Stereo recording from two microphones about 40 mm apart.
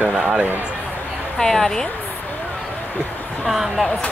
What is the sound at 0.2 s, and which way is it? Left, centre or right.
Speech, right.